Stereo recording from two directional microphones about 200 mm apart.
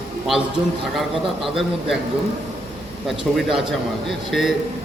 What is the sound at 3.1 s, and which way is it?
A man's voice, centre (ahead or behind).